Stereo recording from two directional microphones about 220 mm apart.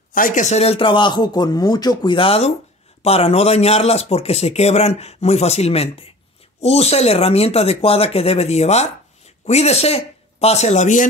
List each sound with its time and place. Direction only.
0.1 s speech: 35° left (ahead or behind)